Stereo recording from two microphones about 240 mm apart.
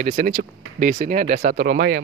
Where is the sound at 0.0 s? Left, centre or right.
Right.